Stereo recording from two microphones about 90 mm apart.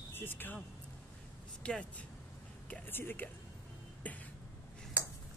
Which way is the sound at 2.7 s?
25° left (ahead or behind).